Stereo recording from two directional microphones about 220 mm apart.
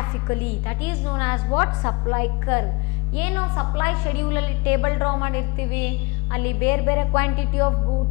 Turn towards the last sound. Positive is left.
turn(degrees=15)  # may be behind; listen again after turning